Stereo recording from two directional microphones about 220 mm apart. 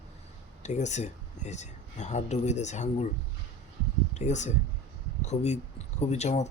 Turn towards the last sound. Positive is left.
turn(degrees=30)  # may be behind; listen again after turning